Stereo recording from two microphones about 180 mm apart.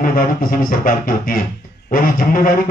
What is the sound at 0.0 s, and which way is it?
Speech, 50° left (ahead or behind).